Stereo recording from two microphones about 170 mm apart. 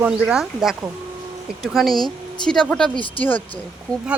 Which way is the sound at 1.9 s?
25° left (ahead or behind).